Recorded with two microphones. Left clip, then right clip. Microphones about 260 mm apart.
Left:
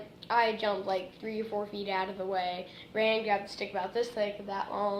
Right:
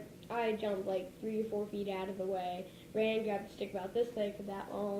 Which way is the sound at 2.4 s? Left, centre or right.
Left.